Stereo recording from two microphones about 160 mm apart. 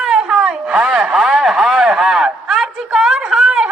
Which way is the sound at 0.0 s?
5° right (ahead or behind).